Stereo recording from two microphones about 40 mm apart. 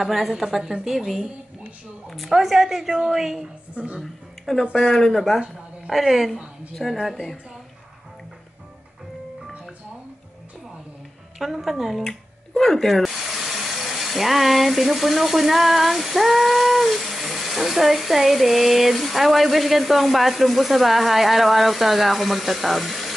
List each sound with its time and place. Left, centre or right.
0.0 s a woman's voice: centre
2.4 s a woman's voice: centre
3.7 s a woman's voice: right
4.0 s a woman's voice: centre
5.9 s a woman's voice: centre
6.7 s speech: centre
11.3 s a woman's voice: centre
12.0 s speech: centre